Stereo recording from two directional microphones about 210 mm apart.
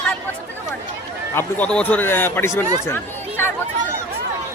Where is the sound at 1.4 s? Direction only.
5° left (ahead or behind).